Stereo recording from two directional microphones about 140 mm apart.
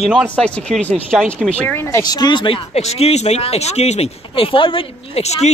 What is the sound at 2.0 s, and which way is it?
Speech, 30° left (ahead or behind).